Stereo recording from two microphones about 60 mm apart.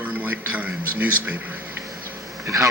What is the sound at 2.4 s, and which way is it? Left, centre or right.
Speech, right.